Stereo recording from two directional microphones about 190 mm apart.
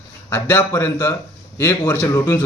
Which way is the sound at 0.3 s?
15° left (ahead or behind).